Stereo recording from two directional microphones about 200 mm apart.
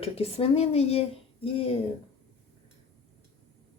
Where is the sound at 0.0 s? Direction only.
30° left (ahead or behind).